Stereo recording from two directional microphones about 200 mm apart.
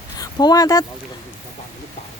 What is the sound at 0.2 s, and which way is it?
Speech, 20° left (ahead or behind).